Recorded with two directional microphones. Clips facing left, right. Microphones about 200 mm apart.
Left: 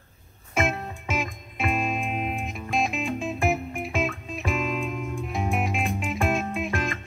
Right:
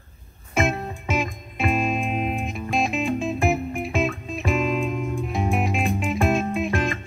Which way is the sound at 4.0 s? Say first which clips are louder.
Right 4 dB; 30° right (ahead or behind).